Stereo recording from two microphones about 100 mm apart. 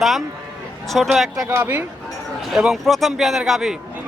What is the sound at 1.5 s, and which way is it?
Speech, 20° right (ahead or behind).